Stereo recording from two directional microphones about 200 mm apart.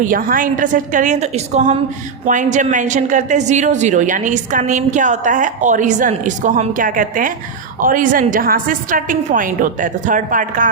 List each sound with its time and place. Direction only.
0.0 s a woman's voice: 45° right (ahead or behind)